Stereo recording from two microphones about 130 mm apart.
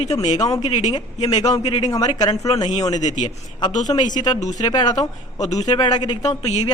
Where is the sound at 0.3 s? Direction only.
25° left (ahead or behind).